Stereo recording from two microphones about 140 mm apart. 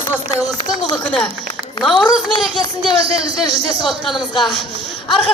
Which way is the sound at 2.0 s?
30° left (ahead or behind).